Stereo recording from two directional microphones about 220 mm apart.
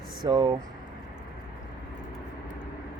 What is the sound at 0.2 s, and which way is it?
Speech, 15° right (ahead or behind).